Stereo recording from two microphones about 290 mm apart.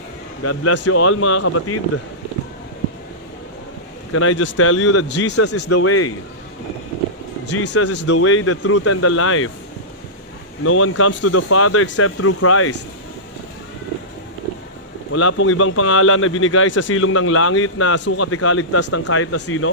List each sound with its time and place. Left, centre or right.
0.4 s speech: left
4.1 s speech: left
7.4 s speech: left
10.6 s speech: left
15.1 s speech: left